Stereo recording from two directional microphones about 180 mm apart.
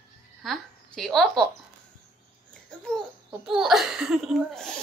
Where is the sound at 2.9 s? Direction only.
Centre (ahead or behind).